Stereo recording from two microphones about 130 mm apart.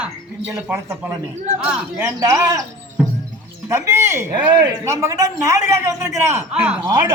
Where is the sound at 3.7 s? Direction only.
20° right (ahead or behind).